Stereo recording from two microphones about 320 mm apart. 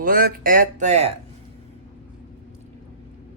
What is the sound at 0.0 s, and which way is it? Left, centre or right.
Speech, right.